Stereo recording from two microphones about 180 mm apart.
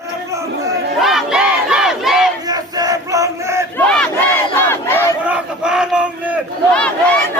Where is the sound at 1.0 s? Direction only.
Centre (ahead or behind).